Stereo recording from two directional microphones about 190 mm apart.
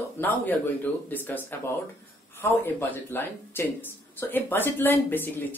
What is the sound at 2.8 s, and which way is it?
Speech, 10° left (ahead or behind).